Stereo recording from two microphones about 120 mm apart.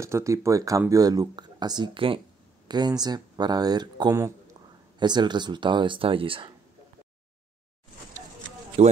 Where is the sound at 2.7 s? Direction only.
35° right (ahead or behind).